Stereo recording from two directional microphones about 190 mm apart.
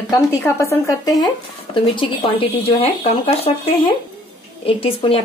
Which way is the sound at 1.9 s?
25° left (ahead or behind).